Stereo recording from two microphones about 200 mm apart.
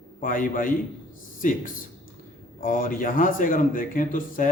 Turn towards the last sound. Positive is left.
turn(degrees=45)  # may be behind; listen again after turning